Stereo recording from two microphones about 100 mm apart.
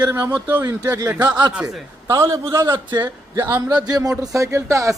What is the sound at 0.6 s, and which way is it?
Speech, 35° right (ahead or behind).